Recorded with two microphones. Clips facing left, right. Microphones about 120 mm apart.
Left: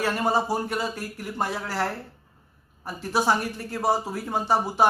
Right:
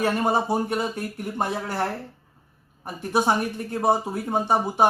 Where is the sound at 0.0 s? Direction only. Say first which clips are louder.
Right 2 dB; 20° right (ahead or behind).